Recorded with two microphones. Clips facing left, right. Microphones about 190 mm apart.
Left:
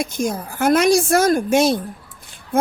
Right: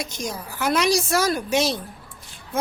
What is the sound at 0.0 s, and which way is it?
Speech, 50° left (ahead or behind).